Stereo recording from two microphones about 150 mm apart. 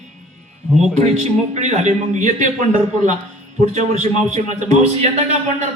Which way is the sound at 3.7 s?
50° right (ahead or behind).